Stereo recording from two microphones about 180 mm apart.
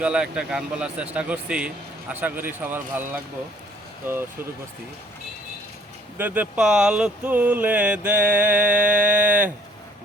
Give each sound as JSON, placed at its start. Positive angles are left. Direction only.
{"t": 0.0, "sound": "speech", "side_deg": -5}
{"t": 6.1, "sound": "speech", "side_deg": -10}